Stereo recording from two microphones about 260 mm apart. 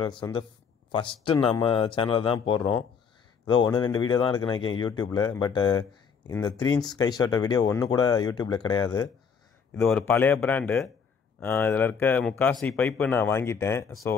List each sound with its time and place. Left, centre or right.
0.0 s speech: centre
9.8 s speech: centre